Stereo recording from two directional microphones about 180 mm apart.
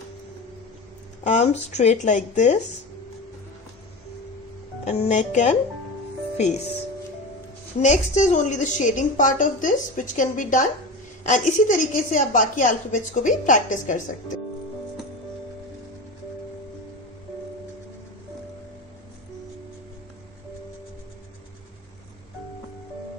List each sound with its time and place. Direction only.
1.3 s speech: 40° left (ahead or behind)
4.9 s speech: 40° left (ahead or behind)
7.8 s a woman's voice: 40° left (ahead or behind)